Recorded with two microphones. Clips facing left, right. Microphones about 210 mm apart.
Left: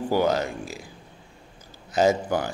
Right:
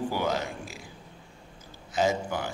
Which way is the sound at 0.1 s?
40° left (ahead or behind).